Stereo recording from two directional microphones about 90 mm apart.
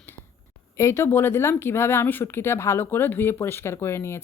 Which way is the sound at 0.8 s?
30° left (ahead or behind).